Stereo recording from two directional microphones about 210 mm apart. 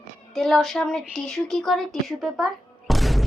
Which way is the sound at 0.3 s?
Centre (ahead or behind).